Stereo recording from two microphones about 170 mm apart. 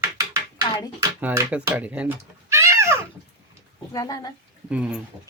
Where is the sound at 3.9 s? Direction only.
25° left (ahead or behind).